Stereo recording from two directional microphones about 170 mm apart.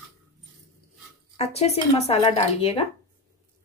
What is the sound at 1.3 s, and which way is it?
Speech, 40° left (ahead or behind).